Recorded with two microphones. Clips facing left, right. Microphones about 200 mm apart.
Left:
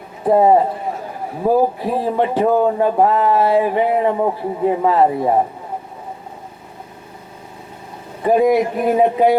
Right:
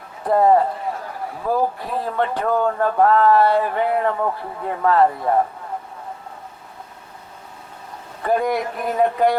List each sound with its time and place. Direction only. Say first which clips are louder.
0.3 s a man's voice: left 3 dB; 15° left (ahead or behind)
2.0 s speech: left 5 dB; 10° left (ahead or behind)
8.2 s speech: left 7 dB; 5° left (ahead or behind)